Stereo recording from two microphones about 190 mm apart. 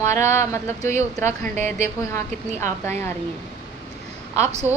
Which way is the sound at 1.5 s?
40° right (ahead or behind).